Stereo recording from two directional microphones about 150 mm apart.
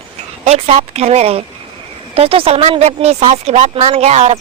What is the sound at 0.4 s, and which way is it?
A woman's voice, 45° right (ahead or behind).